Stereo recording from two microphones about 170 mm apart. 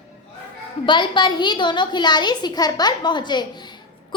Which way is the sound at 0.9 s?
25° left (ahead or behind).